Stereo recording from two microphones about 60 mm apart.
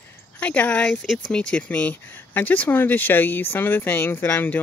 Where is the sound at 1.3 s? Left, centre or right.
Centre.